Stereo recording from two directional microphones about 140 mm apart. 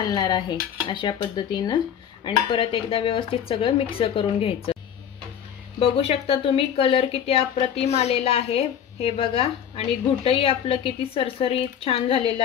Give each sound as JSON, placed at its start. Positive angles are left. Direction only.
{"t": 0.1, "sound": "speech", "side_deg": 30}
{"t": 5.8, "sound": "speech", "side_deg": 45}